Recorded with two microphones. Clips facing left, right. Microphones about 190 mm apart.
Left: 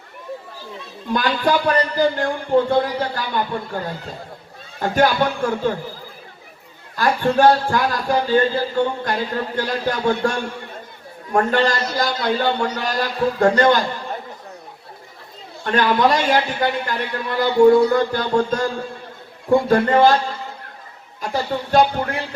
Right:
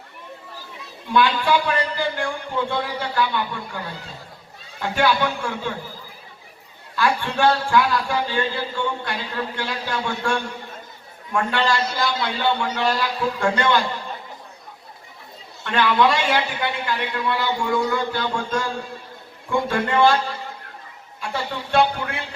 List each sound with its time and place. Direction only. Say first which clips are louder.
1.1 s a man's voice: even; 40° left (ahead or behind)
6.9 s a man's voice: left 5 dB; 40° left (ahead or behind)
15.6 s a man's voice: left 2 dB; 40° left (ahead or behind)
21.2 s speech: left 5 dB; 40° left (ahead or behind)